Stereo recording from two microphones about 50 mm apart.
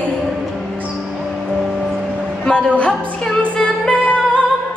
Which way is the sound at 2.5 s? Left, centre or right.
Centre.